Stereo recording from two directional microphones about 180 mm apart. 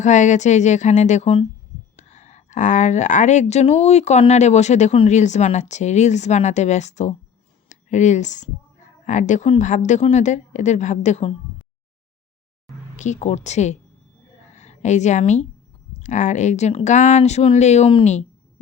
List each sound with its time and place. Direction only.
0.0 s speech: 40° left (ahead or behind)
13.0 s speech: 40° left (ahead or behind)